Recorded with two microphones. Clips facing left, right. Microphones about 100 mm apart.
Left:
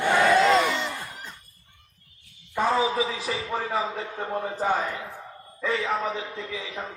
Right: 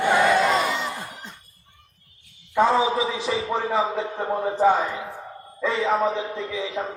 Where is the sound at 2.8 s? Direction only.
25° right (ahead or behind).